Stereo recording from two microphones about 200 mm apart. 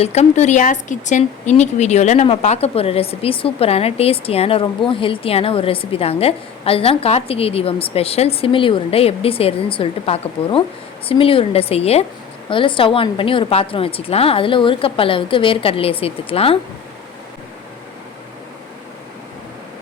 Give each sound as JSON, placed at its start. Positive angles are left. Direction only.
{"t": 0.0, "sound": "speech", "side_deg": 35}